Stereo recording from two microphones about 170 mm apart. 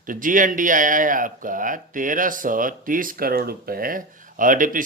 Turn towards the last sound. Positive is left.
turn(degrees=-50)  # may be behind; listen again after turning